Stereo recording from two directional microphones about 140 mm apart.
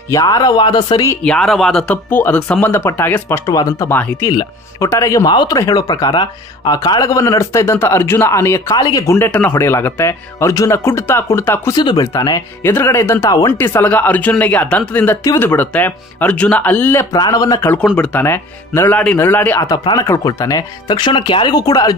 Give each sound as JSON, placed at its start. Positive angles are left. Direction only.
{"t": 0.1, "sound": "speech", "side_deg": 25}
{"t": 1.2, "sound": "speech", "side_deg": 5}
{"t": 11.7, "sound": "speech", "side_deg": 30}
{"t": 17.9, "sound": "speech", "side_deg": 15}